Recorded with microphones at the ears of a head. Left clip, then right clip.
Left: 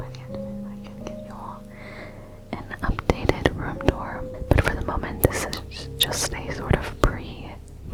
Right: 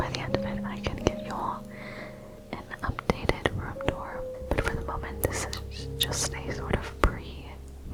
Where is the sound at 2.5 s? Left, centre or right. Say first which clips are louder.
Left 5 dB; left.